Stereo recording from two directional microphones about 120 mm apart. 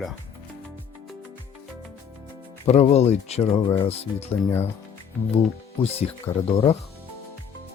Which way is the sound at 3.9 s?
60° left (ahead or behind).